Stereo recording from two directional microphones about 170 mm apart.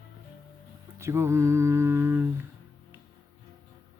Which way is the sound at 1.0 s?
15° right (ahead or behind).